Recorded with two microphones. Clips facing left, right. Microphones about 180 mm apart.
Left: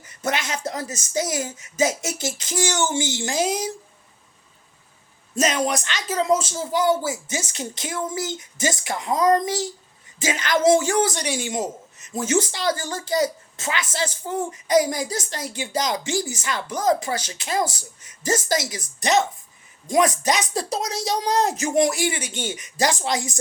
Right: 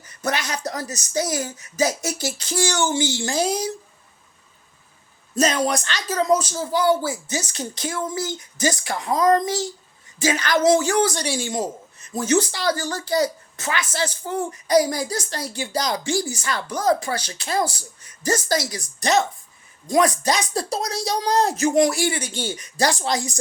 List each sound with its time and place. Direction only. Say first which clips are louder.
0.0 s speech: even; 20° left (ahead or behind)
6.1 s speech: right 1 dB; 25° left (ahead or behind)
22.2 s speech: right 1 dB; 35° right (ahead or behind)
22.8 s speech: right 1 dB; 15° left (ahead or behind)